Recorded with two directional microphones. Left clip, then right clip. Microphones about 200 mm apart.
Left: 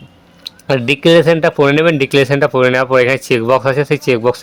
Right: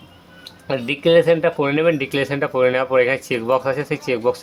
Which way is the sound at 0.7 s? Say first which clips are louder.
Left 6 dB; 40° left (ahead or behind).